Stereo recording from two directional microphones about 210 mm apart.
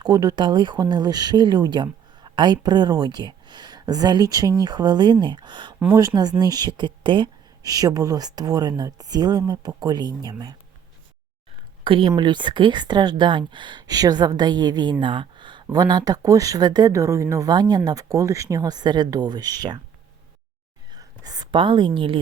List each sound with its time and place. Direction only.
0.0 s speech: 20° right (ahead or behind)
11.8 s speech: 25° right (ahead or behind)
20.9 s speech: 20° right (ahead or behind)